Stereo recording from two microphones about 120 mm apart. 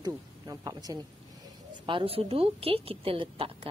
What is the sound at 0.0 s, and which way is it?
Speech, 30° right (ahead or behind).